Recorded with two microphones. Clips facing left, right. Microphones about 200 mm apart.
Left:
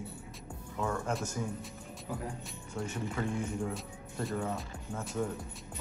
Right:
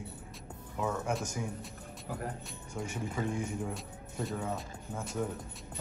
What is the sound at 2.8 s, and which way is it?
Speech, 20° right (ahead or behind).